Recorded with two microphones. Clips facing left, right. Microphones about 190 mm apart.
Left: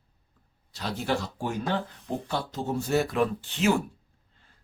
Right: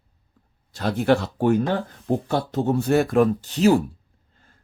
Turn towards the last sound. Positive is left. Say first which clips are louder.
# right 7 dB
turn(degrees=-35)  # may be behind; listen again after turning